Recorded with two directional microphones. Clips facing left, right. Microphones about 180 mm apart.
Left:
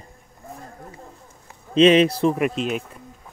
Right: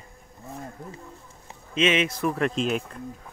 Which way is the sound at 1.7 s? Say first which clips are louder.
Left 9 dB; 35° left (ahead or behind).